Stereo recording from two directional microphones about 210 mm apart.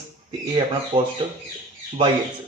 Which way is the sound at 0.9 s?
40° right (ahead or behind).